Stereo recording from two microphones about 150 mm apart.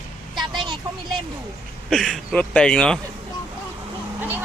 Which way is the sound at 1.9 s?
Centre (ahead or behind).